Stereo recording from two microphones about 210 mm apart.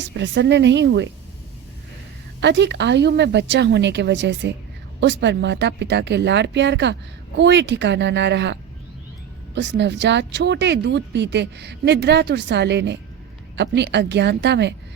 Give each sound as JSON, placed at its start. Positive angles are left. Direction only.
{"t": 0.0, "sound": "speech", "side_deg": -60}
{"t": 2.4, "sound": "speech", "side_deg": -55}
{"t": 9.6, "sound": "speech", "side_deg": -55}